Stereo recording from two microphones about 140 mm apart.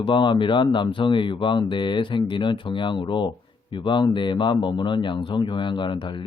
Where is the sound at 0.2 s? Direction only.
35° left (ahead or behind).